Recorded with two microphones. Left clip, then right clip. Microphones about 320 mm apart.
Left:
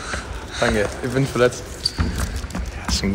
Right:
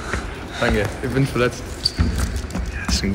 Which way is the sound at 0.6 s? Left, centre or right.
Left.